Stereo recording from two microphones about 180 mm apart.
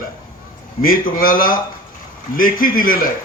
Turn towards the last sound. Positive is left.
turn(degrees=50)  # may be behind; listen again after turning